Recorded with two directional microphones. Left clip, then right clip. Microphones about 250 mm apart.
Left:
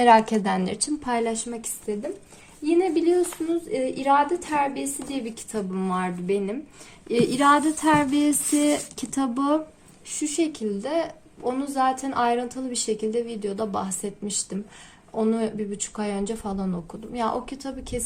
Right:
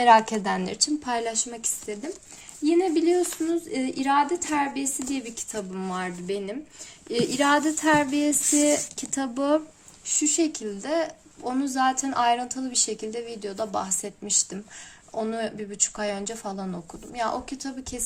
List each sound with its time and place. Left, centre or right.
0.0 s speech: centre
2.6 s a woman's voice: right; by 9.6 s centre
10.1 s a woman's voice: centre